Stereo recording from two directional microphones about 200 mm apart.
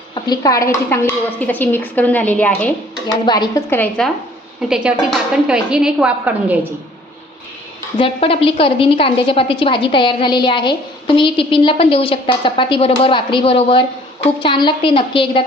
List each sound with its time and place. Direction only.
0.1 s a woman's voice: 20° left (ahead or behind)
3.2 s a woman's voice: 20° left (ahead or behind)
4.7 s a woman's voice: 5° right (ahead or behind)
7.9 s a woman's voice: 25° left (ahead or behind)